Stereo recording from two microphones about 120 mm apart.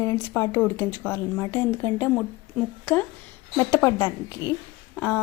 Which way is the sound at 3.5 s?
25° left (ahead or behind).